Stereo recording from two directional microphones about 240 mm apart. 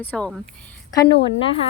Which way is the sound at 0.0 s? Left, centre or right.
Centre.